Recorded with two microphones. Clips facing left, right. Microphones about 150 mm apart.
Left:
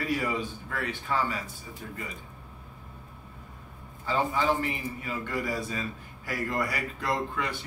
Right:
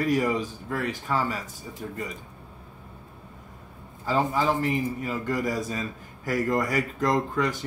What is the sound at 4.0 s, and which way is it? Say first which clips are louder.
A man's voice: right 3 dB; 40° right (ahead or behind).